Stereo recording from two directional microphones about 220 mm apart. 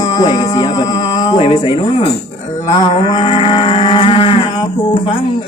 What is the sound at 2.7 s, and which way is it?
Livestock, 20° left (ahead or behind).